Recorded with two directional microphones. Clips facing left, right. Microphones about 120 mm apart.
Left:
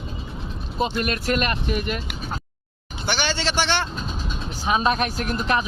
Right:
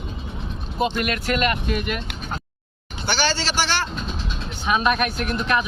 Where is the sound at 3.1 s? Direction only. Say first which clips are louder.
Right 1 dB; 20° left (ahead or behind).